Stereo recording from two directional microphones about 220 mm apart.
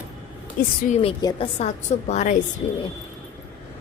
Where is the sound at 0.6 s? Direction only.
40° left (ahead or behind).